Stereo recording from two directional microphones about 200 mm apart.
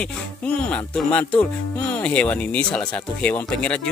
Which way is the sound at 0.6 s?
5° left (ahead or behind).